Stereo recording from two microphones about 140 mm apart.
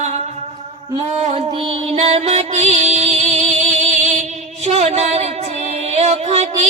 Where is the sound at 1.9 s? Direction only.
50° right (ahead or behind).